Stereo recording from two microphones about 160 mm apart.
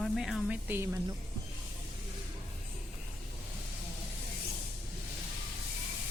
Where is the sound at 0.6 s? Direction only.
15° right (ahead or behind).